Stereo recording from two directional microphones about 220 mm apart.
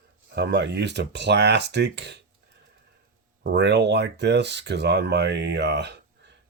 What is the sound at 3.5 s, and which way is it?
Speech, 50° right (ahead or behind).